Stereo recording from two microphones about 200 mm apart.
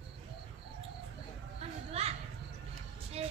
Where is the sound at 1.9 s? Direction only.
30° right (ahead or behind).